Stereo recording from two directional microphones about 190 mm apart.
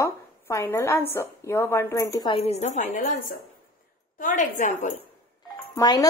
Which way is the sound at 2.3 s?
30° left (ahead or behind).